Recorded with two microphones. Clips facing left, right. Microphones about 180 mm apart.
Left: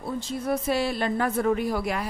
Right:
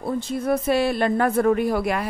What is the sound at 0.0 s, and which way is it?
Speech, 55° right (ahead or behind).